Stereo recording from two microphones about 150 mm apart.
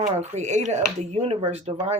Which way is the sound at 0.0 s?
50° right (ahead or behind).